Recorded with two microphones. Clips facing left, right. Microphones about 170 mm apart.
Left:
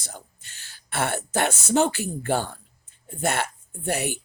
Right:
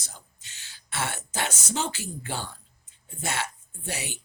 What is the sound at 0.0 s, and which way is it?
Speech, 55° left (ahead or behind).